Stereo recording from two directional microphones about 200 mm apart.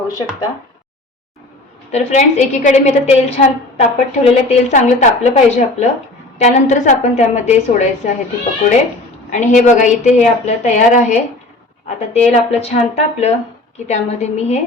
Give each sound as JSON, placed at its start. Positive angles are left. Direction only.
{"t": 1.9, "sound": "a woman's voice", "side_deg": 35}
{"t": 9.3, "sound": "a woman's voice", "side_deg": 35}